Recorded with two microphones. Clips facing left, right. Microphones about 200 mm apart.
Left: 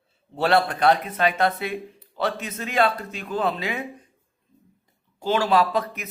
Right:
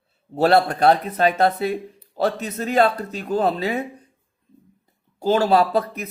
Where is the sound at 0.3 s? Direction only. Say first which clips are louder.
Right 4 dB; 40° right (ahead or behind).